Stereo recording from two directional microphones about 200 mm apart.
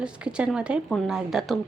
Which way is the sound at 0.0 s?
5° right (ahead or behind).